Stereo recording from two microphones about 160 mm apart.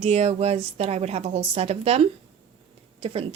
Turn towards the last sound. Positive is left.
turn(degrees=-40)  # may be behind; listen again after turning